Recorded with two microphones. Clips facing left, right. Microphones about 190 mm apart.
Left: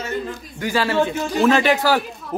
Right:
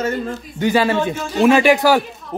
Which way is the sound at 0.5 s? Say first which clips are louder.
Right 3 dB; 20° right (ahead or behind).